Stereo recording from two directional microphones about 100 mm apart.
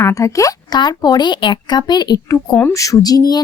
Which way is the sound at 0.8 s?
45° left (ahead or behind).